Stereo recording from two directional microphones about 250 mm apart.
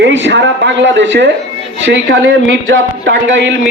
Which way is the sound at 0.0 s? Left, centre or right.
Right.